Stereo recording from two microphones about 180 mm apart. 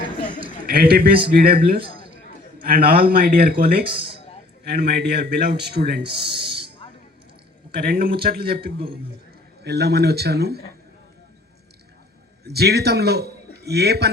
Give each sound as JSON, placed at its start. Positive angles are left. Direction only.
{"t": 0.7, "sound": "speech", "side_deg": -60}
{"t": 4.6, "sound": "speech", "side_deg": -65}
{"t": 7.8, "sound": "speech", "side_deg": -60}
{"t": 12.5, "sound": "a man's voice", "side_deg": -65}